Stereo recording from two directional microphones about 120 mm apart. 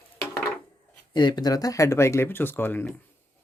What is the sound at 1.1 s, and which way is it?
Speech, 40° left (ahead or behind).